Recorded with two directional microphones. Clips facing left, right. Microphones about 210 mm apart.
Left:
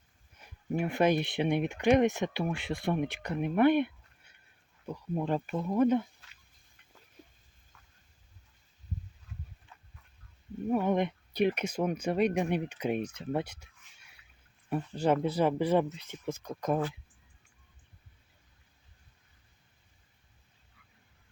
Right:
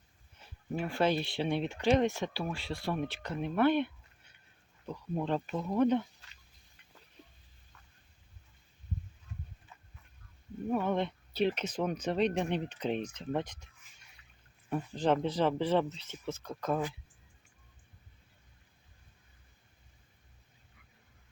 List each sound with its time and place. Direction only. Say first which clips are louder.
0.3 s speech: left 4 dB; 10° left (ahead or behind)
4.9 s speech: left 2 dB; 10° left (ahead or behind)
9.7 s a sound: even; 5° right (ahead or behind)
10.7 s speech: left 3 dB; 10° left (ahead or behind)
14.9 s speech: left 2 dB; 10° left (ahead or behind)